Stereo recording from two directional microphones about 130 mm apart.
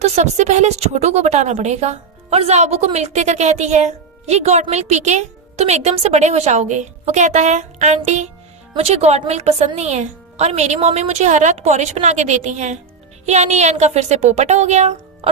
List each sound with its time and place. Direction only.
0.0 s a woman's voice: 60° right (ahead or behind)
8.7 s a woman's voice: 50° right (ahead or behind)